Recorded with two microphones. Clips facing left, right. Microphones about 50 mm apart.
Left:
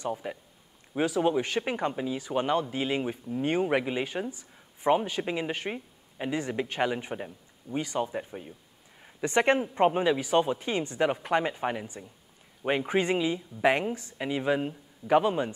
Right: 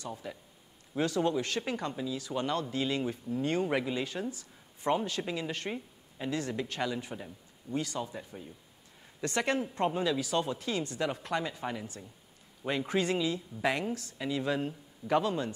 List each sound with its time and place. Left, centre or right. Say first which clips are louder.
0.0 s speech: left 7 dB; left
0.9 s speech: left 4 dB; centre
5.6 s a sound: left 2 dB; left
6.8 s speech: left 5 dB; left
8.0 s a man's voice: left 7 dB; left